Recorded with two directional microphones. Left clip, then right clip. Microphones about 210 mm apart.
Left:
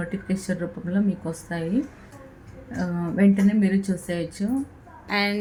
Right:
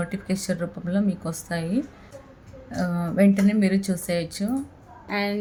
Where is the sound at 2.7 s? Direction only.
10° right (ahead or behind).